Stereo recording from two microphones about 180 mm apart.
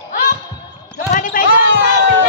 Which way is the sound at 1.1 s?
45° left (ahead or behind).